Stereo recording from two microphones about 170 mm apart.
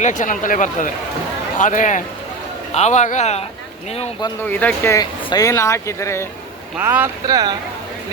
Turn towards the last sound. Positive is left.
turn(degrees=-25)  # may be behind; listen again after turning